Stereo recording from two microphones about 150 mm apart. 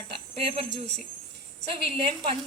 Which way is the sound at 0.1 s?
40° right (ahead or behind).